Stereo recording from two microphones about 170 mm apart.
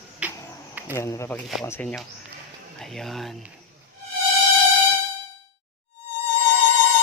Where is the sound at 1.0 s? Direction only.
15° left (ahead or behind).